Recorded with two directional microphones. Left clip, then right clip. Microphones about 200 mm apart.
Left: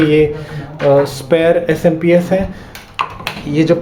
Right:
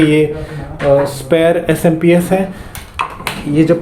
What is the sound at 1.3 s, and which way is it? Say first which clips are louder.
Speech: right 1 dB; 5° right (ahead or behind).